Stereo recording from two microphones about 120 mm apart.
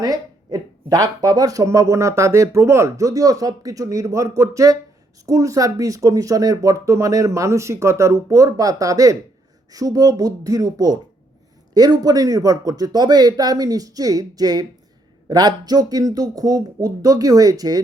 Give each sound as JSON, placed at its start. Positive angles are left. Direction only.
{"t": 0.0, "sound": "speech", "side_deg": -30}